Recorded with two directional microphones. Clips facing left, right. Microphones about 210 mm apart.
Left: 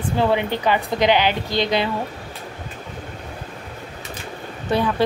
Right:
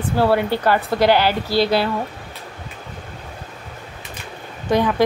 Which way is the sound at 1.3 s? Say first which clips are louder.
Right 3 dB; 10° right (ahead or behind).